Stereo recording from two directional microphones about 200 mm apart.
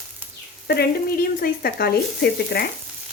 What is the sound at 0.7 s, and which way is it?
A woman's voice, 55° left (ahead or behind).